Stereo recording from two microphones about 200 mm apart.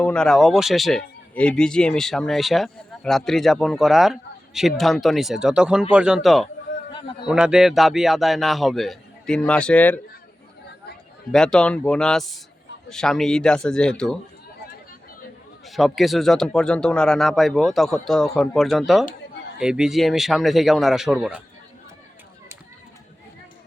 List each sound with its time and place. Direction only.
0.0 s speech: 5° left (ahead or behind)
6.9 s a man's voice: 25° left (ahead or behind)
7.3 s speech: 5° right (ahead or behind)
11.3 s speech: 5° left (ahead or behind)
15.6 s speech: centre (ahead or behind)